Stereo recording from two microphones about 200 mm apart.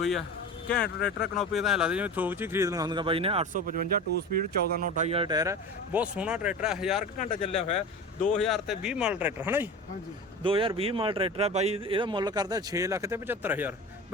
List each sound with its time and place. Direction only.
0.9 s speech: 55° left (ahead or behind)
1.4 s speech: centre (ahead or behind); by 3.5 s 30° right (ahead or behind)
3.5 s speech: 45° right (ahead or behind)
5.0 s speech: 25° right (ahead or behind); by 7.0 s centre (ahead or behind)
7.0 s speech: 40° left (ahead or behind)
8.3 s speech: centre (ahead or behind)
10.4 s speech: 25° right (ahead or behind); by 13.7 s 10° right (ahead or behind)